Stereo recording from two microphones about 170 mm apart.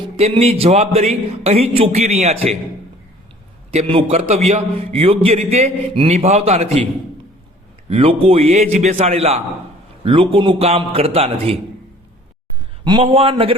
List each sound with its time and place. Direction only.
0.2 s a man's voice: 40° right (ahead or behind)
3.7 s a man's voice: 35° right (ahead or behind)
7.9 s a man's voice: 35° right (ahead or behind)
12.8 s a man's voice: 30° right (ahead or behind)